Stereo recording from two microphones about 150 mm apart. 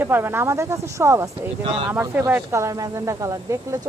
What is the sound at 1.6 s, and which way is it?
Speech, 35° right (ahead or behind).